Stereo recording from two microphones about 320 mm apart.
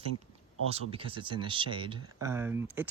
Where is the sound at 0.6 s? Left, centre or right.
Centre.